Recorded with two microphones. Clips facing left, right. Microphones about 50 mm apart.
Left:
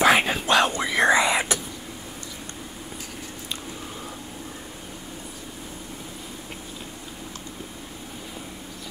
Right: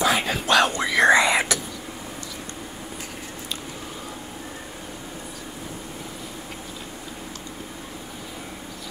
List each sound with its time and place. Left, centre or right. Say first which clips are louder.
0.0 s whispering: left 3 dB; left
1.0 s whispering: right 3 dB; right